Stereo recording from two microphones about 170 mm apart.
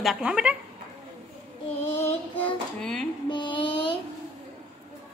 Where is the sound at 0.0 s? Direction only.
Centre (ahead or behind).